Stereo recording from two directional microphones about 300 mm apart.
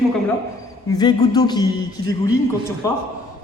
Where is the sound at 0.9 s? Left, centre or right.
Centre.